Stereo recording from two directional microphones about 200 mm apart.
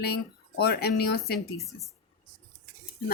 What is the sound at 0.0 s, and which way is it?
A woman's voice, 50° left (ahead or behind).